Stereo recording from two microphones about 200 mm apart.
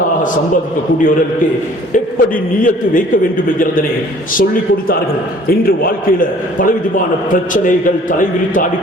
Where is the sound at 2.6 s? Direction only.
40° left (ahead or behind).